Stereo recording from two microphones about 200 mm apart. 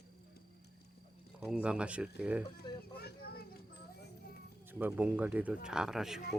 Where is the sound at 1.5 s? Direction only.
5° right (ahead or behind).